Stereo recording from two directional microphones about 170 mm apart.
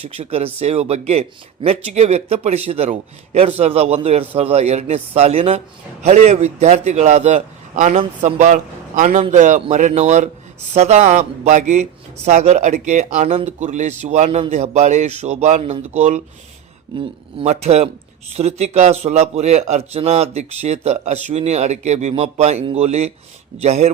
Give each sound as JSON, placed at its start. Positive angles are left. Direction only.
{"t": 0.0, "sound": "a man's voice", "side_deg": -35}